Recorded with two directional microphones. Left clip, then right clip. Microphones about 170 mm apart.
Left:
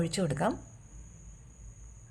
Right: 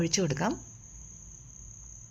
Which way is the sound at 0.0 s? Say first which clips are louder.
Right 1 dB; 20° right (ahead or behind).